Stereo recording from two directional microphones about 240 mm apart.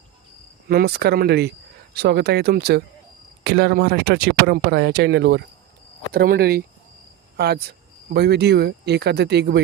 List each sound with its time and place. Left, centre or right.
0.7 s speech: right